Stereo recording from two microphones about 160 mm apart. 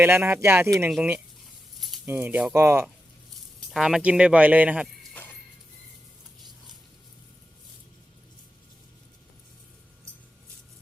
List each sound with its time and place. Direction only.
0.0 s speech: 15° right (ahead or behind)
3.7 s speech: centre (ahead or behind)
5.2 s music: 10° left (ahead or behind)